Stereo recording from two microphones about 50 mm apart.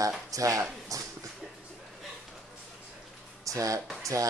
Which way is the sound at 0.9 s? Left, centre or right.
Right.